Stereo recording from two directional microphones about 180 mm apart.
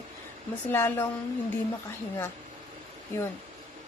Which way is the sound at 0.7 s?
10° left (ahead or behind).